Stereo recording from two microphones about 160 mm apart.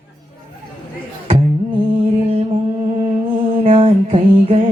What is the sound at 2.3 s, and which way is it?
Music, 35° right (ahead or behind).